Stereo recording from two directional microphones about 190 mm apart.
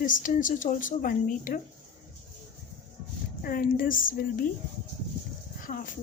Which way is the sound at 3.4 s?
45° left (ahead or behind).